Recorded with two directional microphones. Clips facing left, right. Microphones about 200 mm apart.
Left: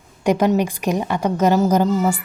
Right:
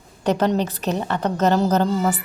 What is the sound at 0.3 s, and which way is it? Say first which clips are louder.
A woman's voice: left 3 dB; 10° left (ahead or behind).